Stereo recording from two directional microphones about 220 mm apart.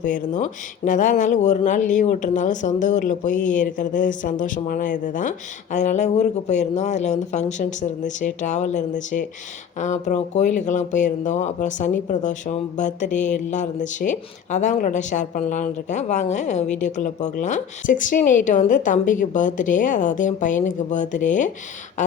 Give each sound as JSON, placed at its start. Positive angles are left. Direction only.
{"t": 0.0, "sound": "speech", "side_deg": 35}